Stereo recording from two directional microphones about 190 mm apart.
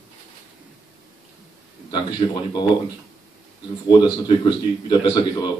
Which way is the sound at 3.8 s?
25° left (ahead or behind).